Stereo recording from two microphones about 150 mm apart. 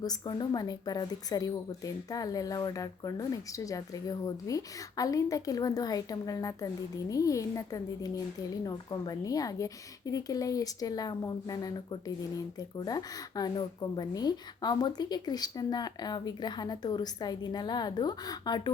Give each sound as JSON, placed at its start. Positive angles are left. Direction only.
{"t": 0.0, "sound": "a woman's voice", "side_deg": 30}